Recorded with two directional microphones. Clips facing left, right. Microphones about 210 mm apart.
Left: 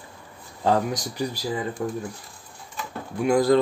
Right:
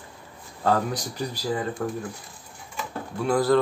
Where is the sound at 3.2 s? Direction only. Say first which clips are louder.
Left 3 dB; 15° left (ahead or behind).